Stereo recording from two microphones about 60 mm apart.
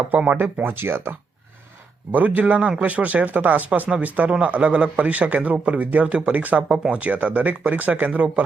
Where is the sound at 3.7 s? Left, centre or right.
Centre.